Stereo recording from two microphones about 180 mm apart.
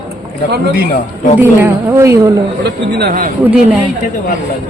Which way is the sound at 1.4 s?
15° right (ahead or behind).